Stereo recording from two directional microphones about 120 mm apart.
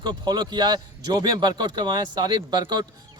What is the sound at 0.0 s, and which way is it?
Speech, 35° right (ahead or behind).